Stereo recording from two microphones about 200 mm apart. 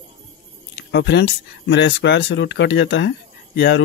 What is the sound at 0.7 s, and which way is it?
Speech, 60° left (ahead or behind).